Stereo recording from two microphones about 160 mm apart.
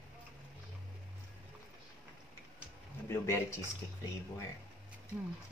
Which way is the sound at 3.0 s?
15° left (ahead or behind).